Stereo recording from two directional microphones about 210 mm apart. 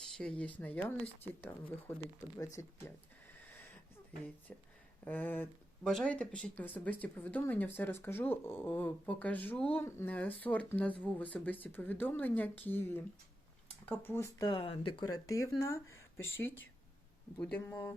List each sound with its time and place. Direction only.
0.0 s speech: 5° left (ahead or behind)
4.5 s speech: 5° left (ahead or behind)